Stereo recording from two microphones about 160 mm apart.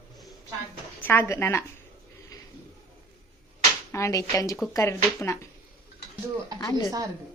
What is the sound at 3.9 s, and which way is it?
Speech, 20° left (ahead or behind).